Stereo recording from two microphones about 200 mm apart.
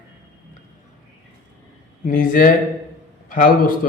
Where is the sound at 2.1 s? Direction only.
40° left (ahead or behind).